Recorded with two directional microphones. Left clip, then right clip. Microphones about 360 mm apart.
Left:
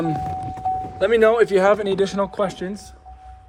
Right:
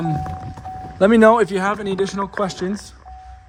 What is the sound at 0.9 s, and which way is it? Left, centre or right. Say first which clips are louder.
Speech: right 3 dB; centre.